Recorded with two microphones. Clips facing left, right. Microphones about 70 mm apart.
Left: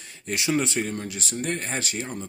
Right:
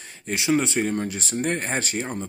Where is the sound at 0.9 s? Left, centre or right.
Right.